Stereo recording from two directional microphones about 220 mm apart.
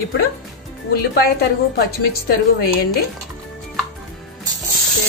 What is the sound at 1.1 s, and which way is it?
A woman's voice, 45° left (ahead or behind).